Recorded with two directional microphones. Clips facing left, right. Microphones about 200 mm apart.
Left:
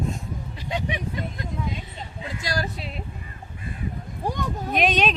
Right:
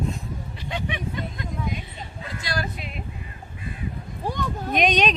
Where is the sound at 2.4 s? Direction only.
40° left (ahead or behind).